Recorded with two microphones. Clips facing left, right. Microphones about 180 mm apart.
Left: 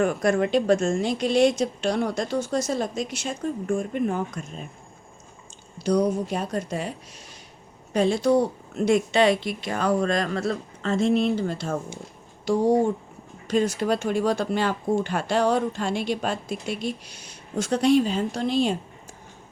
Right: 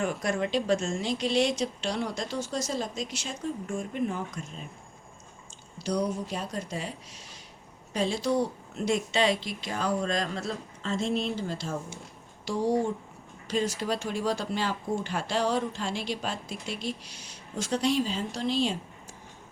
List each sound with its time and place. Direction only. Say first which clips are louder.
0.0 s speech: left 7 dB; 55° left (ahead or behind)
5.8 s speech: left 7 dB; 55° left (ahead or behind)
7.9 s speech: left 7 dB; 55° left (ahead or behind)